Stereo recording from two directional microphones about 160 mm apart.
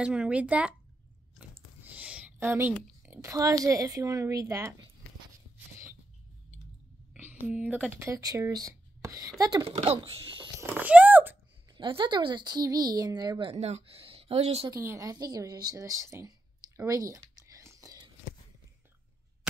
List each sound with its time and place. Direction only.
0.0 s speech: 5° right (ahead or behind)
1.8 s a woman's voice: 10° right (ahead or behind)
7.2 s speech: 10° right (ahead or behind)
9.7 s a woman's voice: 40° right (ahead or behind)
10.6 s speech: 10° right (ahead or behind)
11.7 s a woman's voice: 30° right (ahead or behind)
14.7 s a woman's voice: 20° right (ahead or behind)